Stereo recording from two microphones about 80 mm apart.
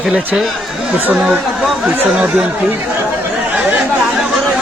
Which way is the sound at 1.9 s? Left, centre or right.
Right.